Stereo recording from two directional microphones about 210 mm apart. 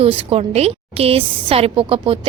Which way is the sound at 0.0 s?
30° right (ahead or behind).